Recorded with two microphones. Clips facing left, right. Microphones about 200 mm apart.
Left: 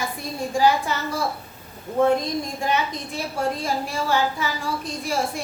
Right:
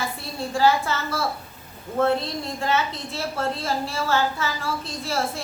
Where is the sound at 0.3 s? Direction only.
15° left (ahead or behind).